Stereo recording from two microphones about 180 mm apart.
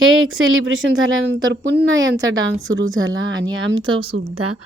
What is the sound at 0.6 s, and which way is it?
Speech, 90° right.